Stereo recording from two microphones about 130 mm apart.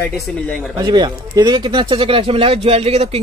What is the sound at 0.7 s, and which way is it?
Speech, 30° right (ahead or behind).